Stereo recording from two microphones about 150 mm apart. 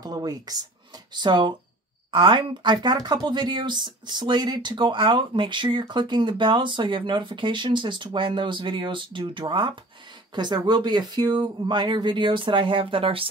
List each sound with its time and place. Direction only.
0.0 s speech: 25° right (ahead or behind)